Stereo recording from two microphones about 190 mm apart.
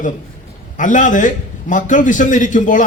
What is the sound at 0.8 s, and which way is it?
A man's voice, 40° left (ahead or behind).